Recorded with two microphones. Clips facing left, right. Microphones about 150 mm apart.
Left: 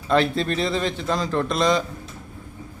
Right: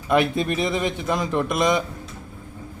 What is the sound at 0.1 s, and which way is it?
A man's voice, 15° right (ahead or behind).